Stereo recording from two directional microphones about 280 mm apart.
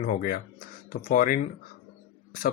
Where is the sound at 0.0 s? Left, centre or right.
Left.